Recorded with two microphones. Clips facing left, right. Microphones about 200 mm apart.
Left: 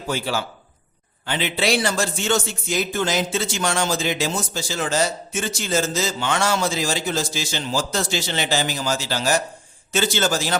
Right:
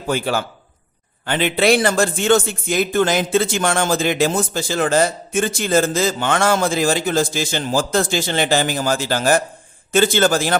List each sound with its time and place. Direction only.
0.1 s a man's voice: 55° right (ahead or behind)